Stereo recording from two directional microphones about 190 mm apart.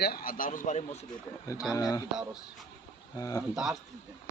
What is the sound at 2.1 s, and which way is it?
Speech, 5° right (ahead or behind).